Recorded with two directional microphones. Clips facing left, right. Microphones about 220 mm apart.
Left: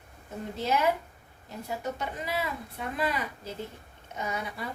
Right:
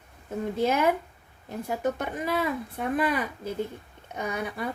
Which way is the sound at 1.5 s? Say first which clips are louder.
Right 6 dB; 50° right (ahead or behind).